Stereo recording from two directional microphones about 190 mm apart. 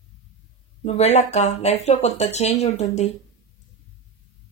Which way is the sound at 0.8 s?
35° left (ahead or behind).